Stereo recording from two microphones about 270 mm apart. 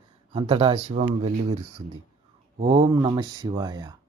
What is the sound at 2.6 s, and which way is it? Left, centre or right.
Speech, centre.